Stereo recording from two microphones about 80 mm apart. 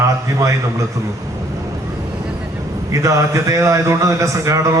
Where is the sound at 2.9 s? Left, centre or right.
Right.